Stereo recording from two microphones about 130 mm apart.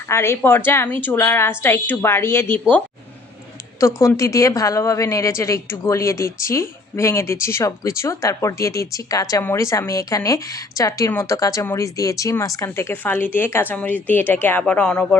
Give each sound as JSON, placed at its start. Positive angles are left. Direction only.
{"t": 0.1, "sound": "a woman's voice", "side_deg": 20}